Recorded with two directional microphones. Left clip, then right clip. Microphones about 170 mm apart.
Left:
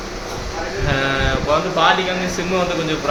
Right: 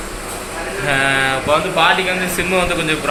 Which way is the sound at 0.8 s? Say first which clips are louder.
Right 5 dB; 5° right (ahead or behind).